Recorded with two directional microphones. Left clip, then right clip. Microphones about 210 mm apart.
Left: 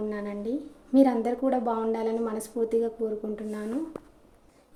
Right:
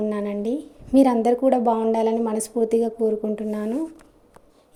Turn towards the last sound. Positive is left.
turn(degrees=-35)  # may be behind; listen again after turning